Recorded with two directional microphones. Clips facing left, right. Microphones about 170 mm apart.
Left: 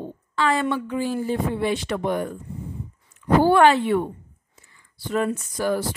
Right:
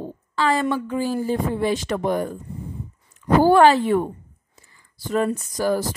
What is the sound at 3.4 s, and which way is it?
Speech, 35° right (ahead or behind).